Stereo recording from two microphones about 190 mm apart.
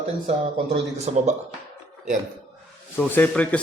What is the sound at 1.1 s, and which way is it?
Speech, 35° right (ahead or behind).